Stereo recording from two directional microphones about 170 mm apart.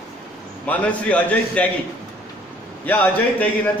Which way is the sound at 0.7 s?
10° left (ahead or behind).